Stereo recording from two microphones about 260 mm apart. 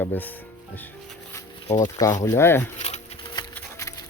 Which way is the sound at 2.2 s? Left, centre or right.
Centre.